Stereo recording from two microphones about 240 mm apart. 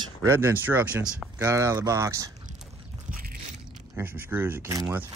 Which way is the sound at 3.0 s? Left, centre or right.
Right.